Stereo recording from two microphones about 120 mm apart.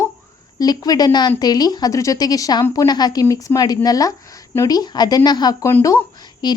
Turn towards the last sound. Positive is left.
turn(degrees=35)  # may be behind; listen again after turning